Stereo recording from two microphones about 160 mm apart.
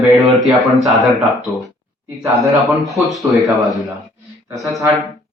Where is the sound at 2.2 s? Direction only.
20° right (ahead or behind).